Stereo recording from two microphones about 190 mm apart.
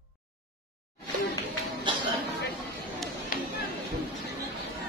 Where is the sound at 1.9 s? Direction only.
25° right (ahead or behind).